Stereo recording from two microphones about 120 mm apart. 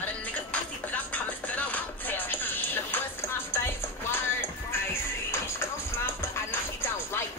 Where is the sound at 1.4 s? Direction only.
10° left (ahead or behind).